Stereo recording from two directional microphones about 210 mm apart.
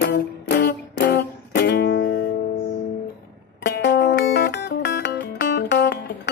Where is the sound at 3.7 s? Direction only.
50° left (ahead or behind).